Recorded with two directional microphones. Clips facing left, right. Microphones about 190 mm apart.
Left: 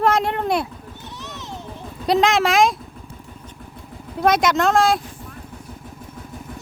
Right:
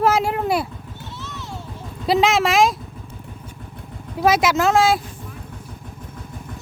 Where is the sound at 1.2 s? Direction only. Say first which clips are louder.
Even; 20° left (ahead or behind).